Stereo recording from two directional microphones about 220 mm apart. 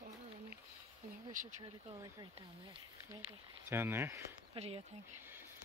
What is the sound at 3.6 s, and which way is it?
Speech, 10° right (ahead or behind).